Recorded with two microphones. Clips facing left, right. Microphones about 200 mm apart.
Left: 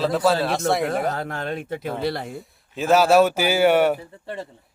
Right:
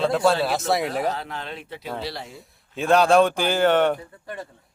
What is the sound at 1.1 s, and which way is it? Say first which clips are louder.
Speech: left 2 dB; 50° left (ahead or behind).